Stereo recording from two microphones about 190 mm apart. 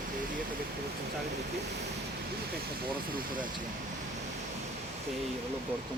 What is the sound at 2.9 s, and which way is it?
Speech, 50° right (ahead or behind).